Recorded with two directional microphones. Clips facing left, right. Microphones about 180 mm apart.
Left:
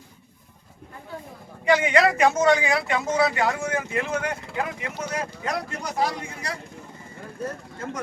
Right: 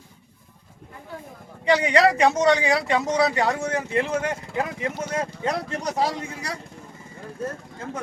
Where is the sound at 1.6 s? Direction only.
35° right (ahead or behind).